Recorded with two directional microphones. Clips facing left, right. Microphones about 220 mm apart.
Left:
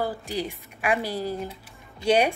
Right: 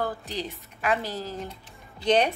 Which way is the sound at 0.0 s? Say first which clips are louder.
Left 2 dB; 10° left (ahead or behind).